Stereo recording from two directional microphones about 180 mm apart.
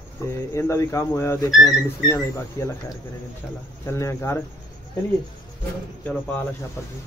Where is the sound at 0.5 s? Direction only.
15° left (ahead or behind).